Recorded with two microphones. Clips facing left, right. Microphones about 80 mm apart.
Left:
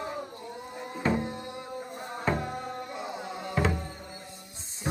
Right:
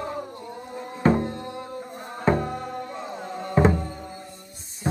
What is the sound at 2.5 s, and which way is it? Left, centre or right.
Music, centre.